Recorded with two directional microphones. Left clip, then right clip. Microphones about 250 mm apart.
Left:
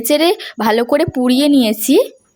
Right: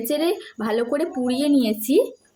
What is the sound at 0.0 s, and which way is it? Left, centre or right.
A woman's voice, left.